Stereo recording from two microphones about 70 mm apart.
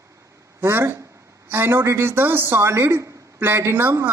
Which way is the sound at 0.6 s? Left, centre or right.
Right.